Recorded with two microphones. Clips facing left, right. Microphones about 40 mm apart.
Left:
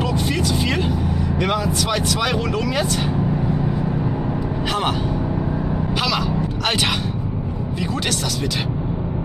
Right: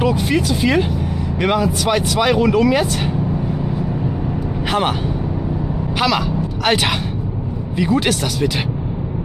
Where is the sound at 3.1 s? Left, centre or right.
Centre.